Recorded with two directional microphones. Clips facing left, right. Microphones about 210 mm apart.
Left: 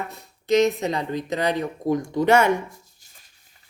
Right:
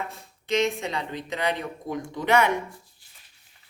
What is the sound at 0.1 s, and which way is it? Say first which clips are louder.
Speech: left 11 dB; 40° left (ahead or behind).